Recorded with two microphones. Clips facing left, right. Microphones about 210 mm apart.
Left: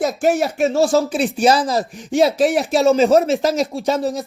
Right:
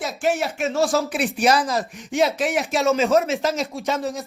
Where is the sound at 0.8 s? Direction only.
Centre (ahead or behind).